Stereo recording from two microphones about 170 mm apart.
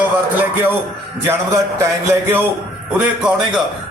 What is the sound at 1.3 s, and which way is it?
Speech, 15° right (ahead or behind).